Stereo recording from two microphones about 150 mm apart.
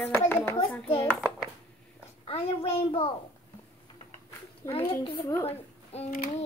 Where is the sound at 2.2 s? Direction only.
40° left (ahead or behind).